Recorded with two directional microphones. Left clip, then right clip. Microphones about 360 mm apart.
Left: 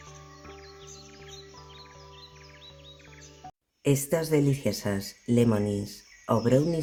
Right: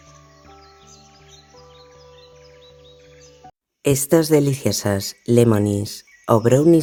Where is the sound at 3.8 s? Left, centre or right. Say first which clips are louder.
Right 10 dB; right.